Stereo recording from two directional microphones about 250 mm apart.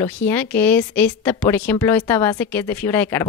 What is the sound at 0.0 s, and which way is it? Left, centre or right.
Speech, centre.